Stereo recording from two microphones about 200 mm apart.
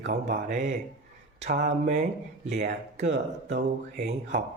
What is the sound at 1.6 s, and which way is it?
Speech, 40° right (ahead or behind).